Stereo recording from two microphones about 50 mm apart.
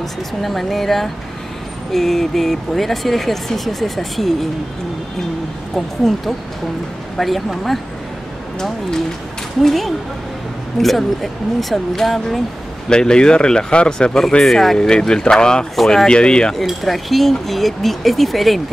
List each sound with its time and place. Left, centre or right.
0.4 s speech: centre
5.8 s speech: centre
12.9 s speech: centre
15.7 s speech: centre
16.1 s speech: centre
16.5 s speech: centre